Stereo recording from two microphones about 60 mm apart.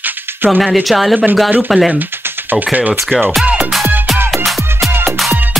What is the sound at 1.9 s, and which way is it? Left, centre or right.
Speech, right.